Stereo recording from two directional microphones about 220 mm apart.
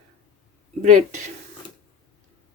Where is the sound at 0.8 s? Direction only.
35° right (ahead or behind).